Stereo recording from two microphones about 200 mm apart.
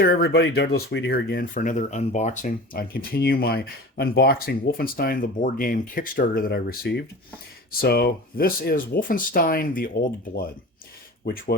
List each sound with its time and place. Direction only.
0.0 s speech: 50° left (ahead or behind)